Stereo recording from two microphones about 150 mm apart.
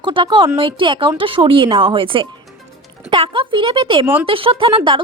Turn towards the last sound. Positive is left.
turn(degrees=-35)  # may be behind; listen again after turning